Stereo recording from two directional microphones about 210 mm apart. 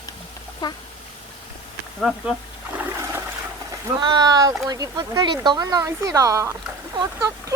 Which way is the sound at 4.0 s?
20° right (ahead or behind).